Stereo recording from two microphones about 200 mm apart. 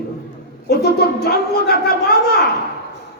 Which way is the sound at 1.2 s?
55° left (ahead or behind).